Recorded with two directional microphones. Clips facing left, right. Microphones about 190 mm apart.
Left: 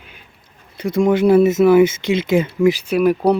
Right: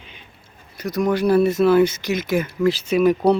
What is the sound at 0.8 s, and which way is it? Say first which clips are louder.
Speech: left 5 dB; 25° left (ahead or behind).